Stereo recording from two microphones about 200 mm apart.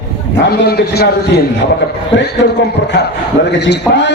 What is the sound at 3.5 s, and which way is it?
Speech, 60° left (ahead or behind).